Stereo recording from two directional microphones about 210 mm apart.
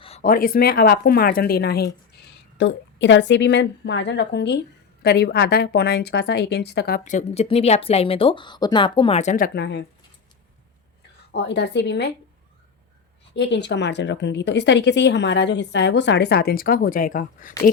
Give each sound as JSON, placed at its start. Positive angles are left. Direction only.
{"t": 0.2, "sound": "speech", "side_deg": 40}
{"t": 2.6, "sound": "a woman's voice", "side_deg": 60}
{"t": 11.3, "sound": "a woman's voice", "side_deg": 55}
{"t": 13.3, "sound": "a woman's voice", "side_deg": 55}